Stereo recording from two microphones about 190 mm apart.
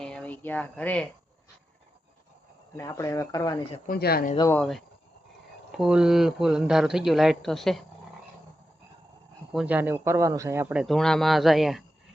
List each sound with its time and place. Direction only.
0.0 s speech: 5° left (ahead or behind)
2.7 s speech: 15° left (ahead or behind)
3.8 s speech: 55° left (ahead or behind)
4.4 s speech: 15° left (ahead or behind)
5.7 s speech: 5° right (ahead or behind)
9.5 s speech: 5° right (ahead or behind)